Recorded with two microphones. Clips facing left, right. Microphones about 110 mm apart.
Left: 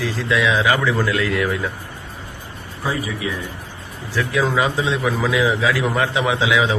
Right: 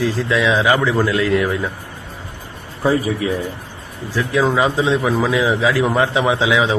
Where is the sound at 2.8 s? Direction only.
35° right (ahead or behind).